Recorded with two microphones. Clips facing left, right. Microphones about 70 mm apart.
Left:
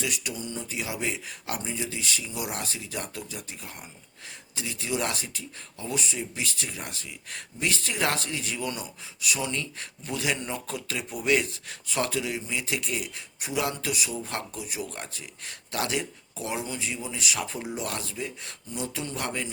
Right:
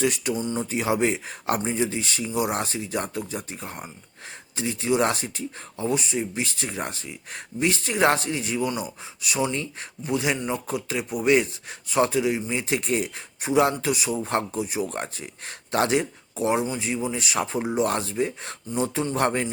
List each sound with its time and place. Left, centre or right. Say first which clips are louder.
0.0 s speech: right 8 dB; right
0.3 s speech: right 8 dB; right
0.6 s speech: right 9 dB; right